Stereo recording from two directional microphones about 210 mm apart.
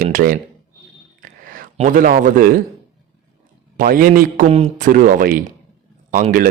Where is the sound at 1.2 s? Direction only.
40° right (ahead or behind).